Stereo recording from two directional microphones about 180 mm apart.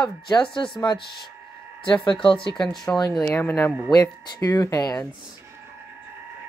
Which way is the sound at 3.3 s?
15° left (ahead or behind).